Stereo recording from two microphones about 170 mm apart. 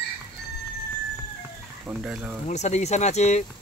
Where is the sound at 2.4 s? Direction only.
40° left (ahead or behind).